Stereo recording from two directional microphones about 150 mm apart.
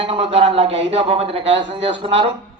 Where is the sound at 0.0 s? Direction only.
40° right (ahead or behind).